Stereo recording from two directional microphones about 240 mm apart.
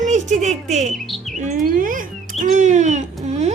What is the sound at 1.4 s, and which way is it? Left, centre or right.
Speech, right.